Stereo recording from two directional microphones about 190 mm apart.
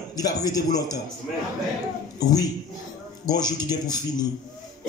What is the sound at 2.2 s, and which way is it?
Speech, 20° left (ahead or behind).